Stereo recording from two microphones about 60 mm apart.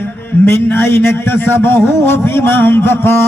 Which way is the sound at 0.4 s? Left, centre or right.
Left.